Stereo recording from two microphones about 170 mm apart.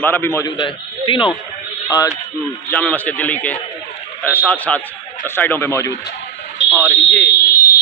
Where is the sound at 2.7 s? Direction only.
10° left (ahead or behind).